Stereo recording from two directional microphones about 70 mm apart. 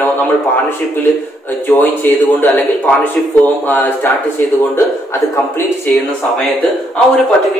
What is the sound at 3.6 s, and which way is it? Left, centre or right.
Speech, left.